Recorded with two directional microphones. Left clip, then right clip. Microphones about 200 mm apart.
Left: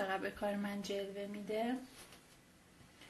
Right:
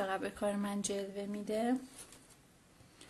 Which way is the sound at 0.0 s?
30° right (ahead or behind).